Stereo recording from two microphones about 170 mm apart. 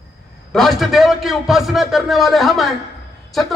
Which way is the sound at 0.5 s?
Centre (ahead or behind).